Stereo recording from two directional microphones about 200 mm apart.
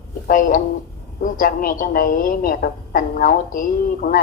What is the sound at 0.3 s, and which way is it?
A woman's voice, 45° left (ahead or behind).